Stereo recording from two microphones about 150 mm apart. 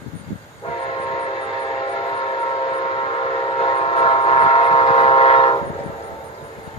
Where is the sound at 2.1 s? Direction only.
35° left (ahead or behind).